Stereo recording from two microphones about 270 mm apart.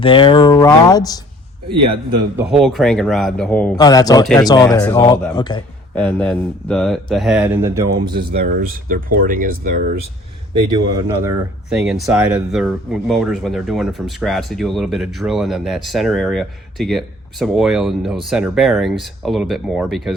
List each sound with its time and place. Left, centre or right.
0.0 s speech: centre
1.7 s a man's voice: centre
2.5 s speech: centre
5.9 s speech: centre
8.3 s speech: right
10.5 s speech: centre